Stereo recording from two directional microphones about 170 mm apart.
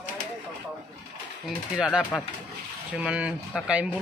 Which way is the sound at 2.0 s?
10° left (ahead or behind).